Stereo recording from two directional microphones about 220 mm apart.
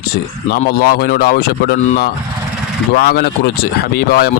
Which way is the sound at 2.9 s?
45° left (ahead or behind).